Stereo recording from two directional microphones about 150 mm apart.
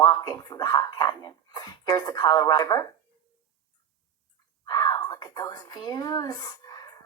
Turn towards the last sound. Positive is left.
turn(degrees=25)  # may be behind; listen again after turning